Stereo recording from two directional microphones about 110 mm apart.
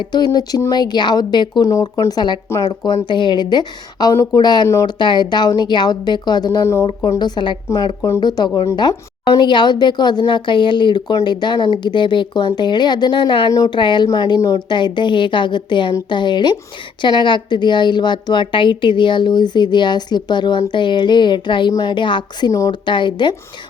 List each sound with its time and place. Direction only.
0.0 s speech: 40° left (ahead or behind)
1.6 s speech: 30° left (ahead or behind)
4.1 s a woman's voice: 30° left (ahead or behind)
22.9 s a woman's voice: 45° left (ahead or behind)